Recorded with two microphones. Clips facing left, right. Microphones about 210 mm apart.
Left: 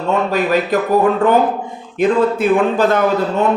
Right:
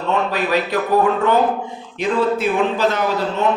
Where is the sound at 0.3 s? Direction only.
45° left (ahead or behind).